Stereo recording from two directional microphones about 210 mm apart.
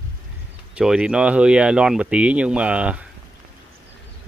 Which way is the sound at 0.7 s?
5° right (ahead or behind).